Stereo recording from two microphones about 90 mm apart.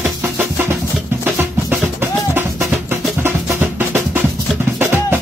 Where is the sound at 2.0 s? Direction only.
25° right (ahead or behind).